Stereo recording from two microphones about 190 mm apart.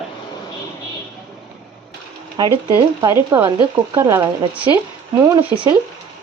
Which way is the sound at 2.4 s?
20° right (ahead or behind).